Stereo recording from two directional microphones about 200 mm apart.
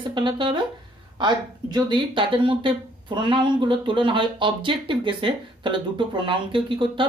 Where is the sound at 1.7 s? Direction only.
25° right (ahead or behind).